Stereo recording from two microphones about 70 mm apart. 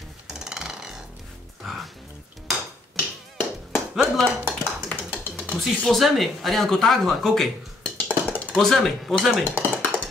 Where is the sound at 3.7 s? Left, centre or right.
Centre.